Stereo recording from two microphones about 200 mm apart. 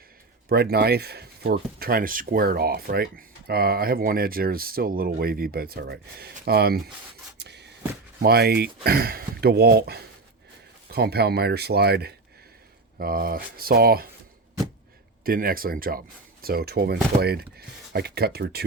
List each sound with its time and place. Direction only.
0.4 s speech: 50° right (ahead or behind)
7.3 s a sound: 55° right (ahead or behind)
8.2 s speech: 50° right (ahead or behind)
15.2 s speech: 45° right (ahead or behind)